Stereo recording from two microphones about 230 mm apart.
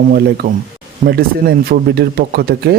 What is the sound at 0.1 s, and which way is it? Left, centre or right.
Speech, right.